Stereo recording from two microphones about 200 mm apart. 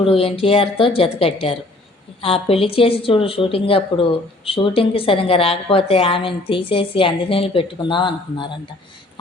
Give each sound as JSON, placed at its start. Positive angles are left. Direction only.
{"t": 0.0, "sound": "speech", "side_deg": 30}